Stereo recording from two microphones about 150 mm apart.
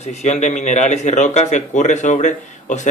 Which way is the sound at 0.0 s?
50° left (ahead or behind).